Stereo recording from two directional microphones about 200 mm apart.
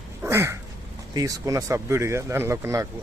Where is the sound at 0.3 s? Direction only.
10° right (ahead or behind).